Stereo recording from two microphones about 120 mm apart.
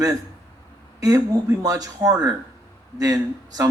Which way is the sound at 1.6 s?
30° right (ahead or behind).